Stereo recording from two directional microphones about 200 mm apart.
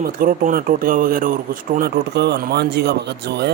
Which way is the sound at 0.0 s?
45° right (ahead or behind).